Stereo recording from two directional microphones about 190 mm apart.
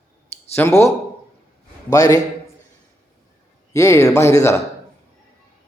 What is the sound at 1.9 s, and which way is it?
Speech, 20° left (ahead or behind).